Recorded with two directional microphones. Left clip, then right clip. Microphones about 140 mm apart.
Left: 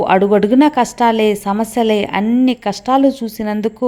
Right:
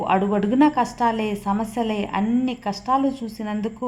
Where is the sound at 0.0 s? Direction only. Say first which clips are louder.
Left 9 dB; 50° left (ahead or behind).